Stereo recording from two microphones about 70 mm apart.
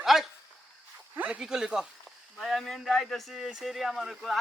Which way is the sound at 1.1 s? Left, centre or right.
Right.